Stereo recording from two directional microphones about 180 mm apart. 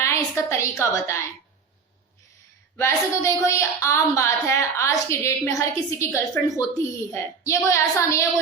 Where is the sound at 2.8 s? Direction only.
15° left (ahead or behind).